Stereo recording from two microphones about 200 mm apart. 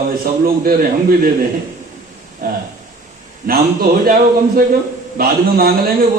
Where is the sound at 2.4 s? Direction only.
45° right (ahead or behind).